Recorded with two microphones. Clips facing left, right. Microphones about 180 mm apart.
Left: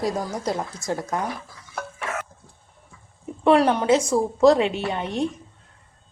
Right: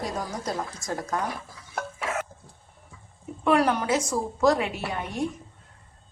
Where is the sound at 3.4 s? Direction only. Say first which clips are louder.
Left 4 dB; 25° left (ahead or behind).